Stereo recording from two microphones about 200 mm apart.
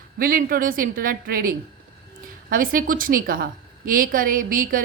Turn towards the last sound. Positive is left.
turn(degrees=-45)  # may be behind; listen again after turning